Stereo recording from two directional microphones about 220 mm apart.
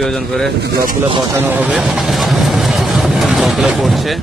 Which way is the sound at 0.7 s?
40° right (ahead or behind).